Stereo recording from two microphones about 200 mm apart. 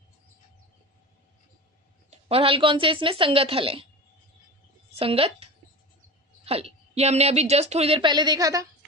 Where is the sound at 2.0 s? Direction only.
30° right (ahead or behind).